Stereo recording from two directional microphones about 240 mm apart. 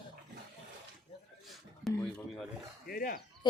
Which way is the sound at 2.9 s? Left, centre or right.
Left.